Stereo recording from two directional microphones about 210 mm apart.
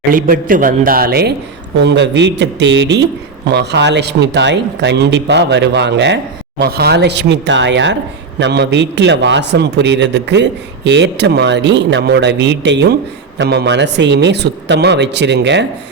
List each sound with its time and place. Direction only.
0.1 s a man's voice: 40° right (ahead or behind)